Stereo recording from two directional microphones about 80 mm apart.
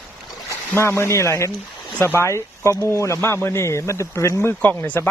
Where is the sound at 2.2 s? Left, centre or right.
Left.